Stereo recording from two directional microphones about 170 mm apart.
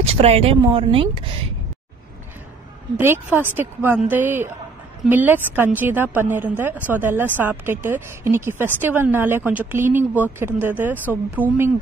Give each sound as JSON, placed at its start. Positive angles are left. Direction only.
{"t": 0.0, "sound": "speech", "side_deg": -35}
{"t": 3.0, "sound": "speech", "side_deg": -15}